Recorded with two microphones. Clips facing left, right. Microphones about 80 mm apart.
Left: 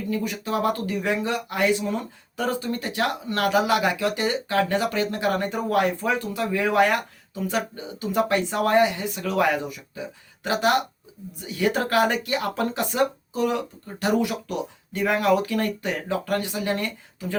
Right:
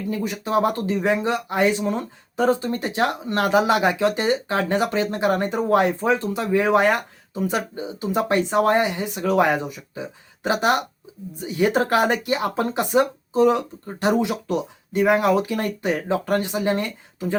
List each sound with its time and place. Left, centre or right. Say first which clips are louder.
0.1 s speech: right 4 dB; right